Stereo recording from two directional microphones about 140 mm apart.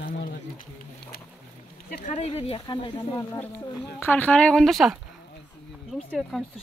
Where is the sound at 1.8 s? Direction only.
55° left (ahead or behind); by 3.2 s 35° left (ahead or behind).